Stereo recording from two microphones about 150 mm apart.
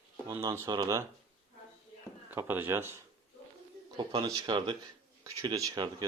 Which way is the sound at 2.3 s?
15° right (ahead or behind).